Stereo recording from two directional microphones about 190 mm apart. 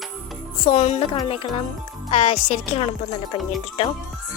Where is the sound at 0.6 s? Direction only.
40° left (ahead or behind).